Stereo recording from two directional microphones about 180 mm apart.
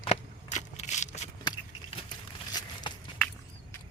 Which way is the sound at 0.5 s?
40° left (ahead or behind).